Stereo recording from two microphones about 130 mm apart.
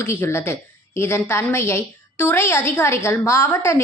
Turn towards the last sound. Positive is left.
turn(degrees=20)  # may be behind; listen again after turning